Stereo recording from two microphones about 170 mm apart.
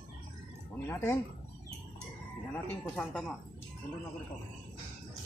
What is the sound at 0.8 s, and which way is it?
Speech, 15° left (ahead or behind).